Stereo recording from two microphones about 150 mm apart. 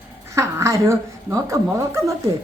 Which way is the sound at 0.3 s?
20° right (ahead or behind).